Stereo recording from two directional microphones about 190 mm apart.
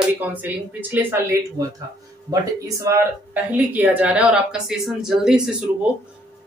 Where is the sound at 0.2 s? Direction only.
10° right (ahead or behind).